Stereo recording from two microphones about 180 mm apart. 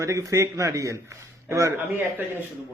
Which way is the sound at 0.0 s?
15° right (ahead or behind).